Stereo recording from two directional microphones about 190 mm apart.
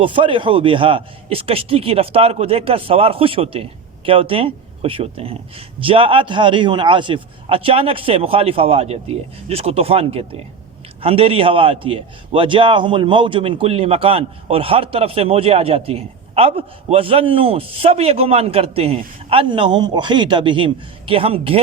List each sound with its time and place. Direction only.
0.0 s a man's voice: 25° right (ahead or behind)